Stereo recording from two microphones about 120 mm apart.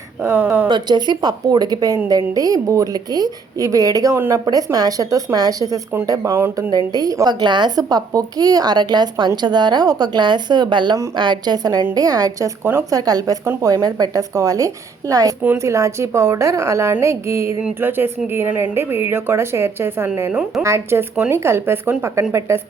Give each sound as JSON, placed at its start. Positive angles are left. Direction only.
{"t": 0.2, "sound": "speech", "side_deg": -15}
{"t": 0.7, "sound": "a child's voice", "side_deg": -35}
{"t": 12.6, "sound": "a woman's voice", "side_deg": -20}
{"t": 13.0, "sound": "a child's voice", "side_deg": -30}